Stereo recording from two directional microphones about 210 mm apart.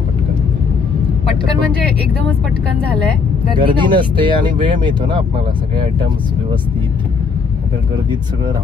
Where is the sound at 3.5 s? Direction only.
20° right (ahead or behind).